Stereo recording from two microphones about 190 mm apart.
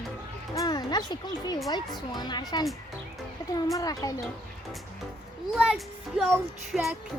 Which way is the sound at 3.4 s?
20° left (ahead or behind).